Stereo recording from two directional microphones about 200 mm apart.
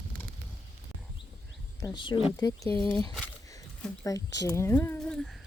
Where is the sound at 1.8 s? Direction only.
20° left (ahead or behind).